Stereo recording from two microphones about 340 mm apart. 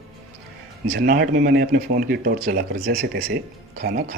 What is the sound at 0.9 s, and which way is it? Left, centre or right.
Speech, right.